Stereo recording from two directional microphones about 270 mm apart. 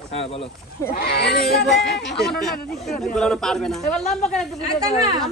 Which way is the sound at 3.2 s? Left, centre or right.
Centre.